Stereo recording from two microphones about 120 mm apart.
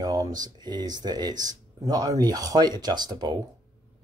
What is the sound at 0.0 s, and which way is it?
Speech, 30° right (ahead or behind).